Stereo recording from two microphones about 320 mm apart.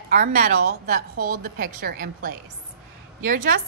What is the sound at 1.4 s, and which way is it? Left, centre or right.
A woman's voice, right.